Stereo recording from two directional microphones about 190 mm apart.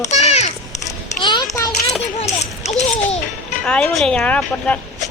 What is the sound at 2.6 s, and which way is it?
Babbling, 35° left (ahead or behind).